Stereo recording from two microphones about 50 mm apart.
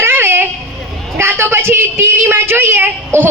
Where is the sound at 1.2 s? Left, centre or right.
Right.